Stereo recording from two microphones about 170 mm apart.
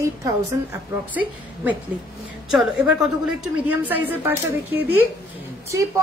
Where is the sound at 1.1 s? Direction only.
10° right (ahead or behind).